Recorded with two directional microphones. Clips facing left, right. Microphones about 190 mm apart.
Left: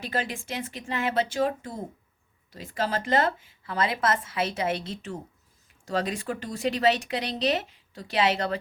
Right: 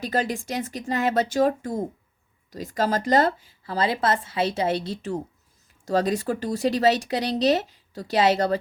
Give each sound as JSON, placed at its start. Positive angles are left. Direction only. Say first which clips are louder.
{"t": 0.0, "sound": "speech", "louder": "right 5 dB", "side_deg": -40}